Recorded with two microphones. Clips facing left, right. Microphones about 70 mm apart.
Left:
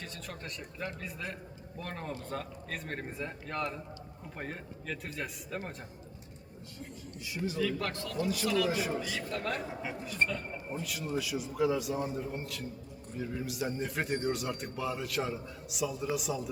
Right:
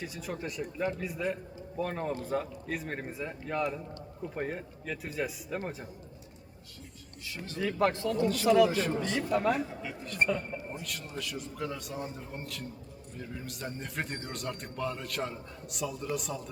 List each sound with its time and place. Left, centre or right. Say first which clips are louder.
0.0 s a man's voice: right 6 dB; centre
7.3 s speech: left 5 dB; centre
7.8 s speech: right 7 dB; right
8.7 s speech: right 3 dB; centre
9.3 s speech: right 9 dB; centre
9.9 s a man's voice: left 1 dB; centre
10.2 s speech: right 3 dB; centre
10.8 s a man's voice: left 4 dB; centre